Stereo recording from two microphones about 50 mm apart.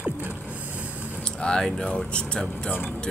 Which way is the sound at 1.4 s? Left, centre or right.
Centre.